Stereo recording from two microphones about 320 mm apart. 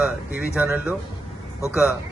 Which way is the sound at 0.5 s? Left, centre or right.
Centre.